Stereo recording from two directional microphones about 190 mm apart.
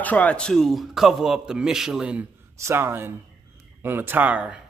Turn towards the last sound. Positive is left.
turn(degrees=-5)  # may be behind; listen again after turning